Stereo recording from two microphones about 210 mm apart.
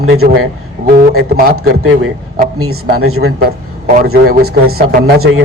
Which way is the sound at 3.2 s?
45° right (ahead or behind).